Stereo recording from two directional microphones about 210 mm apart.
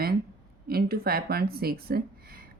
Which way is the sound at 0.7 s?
45° right (ahead or behind).